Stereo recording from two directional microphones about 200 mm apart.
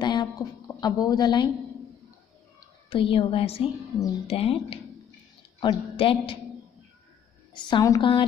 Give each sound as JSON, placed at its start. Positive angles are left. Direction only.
{"t": 0.0, "sound": "a sound", "side_deg": 20}
{"t": 0.7, "sound": "a woman's voice", "side_deg": 20}
{"t": 2.9, "sound": "a woman's voice", "side_deg": 25}
{"t": 7.5, "sound": "a woman's voice", "side_deg": 20}